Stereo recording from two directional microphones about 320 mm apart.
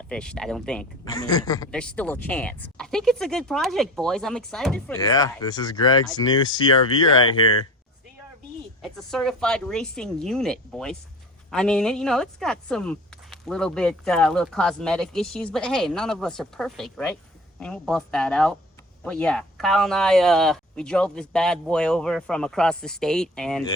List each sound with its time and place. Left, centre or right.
0.1 s a man's voice: centre
8.8 s a man's voice: centre